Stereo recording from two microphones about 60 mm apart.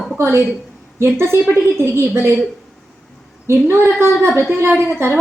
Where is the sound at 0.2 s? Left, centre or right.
Right.